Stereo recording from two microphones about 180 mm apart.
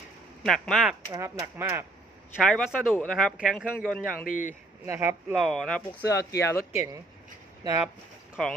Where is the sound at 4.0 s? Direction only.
50° left (ahead or behind).